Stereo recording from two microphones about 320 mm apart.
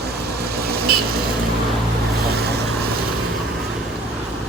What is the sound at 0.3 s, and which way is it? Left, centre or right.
Vehicle, right.